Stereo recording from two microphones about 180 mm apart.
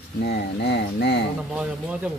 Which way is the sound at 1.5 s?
5° right (ahead or behind).